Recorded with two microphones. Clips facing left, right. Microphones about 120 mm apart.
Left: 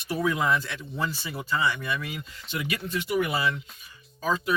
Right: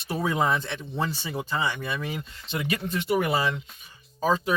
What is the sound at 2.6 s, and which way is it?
Speech, 45° right (ahead or behind).